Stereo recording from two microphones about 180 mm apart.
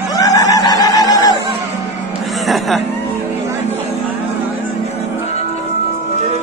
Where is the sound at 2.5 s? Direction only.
Centre (ahead or behind).